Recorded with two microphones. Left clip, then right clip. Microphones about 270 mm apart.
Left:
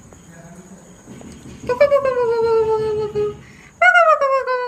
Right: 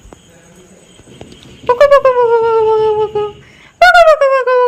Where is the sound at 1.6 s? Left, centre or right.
Centre.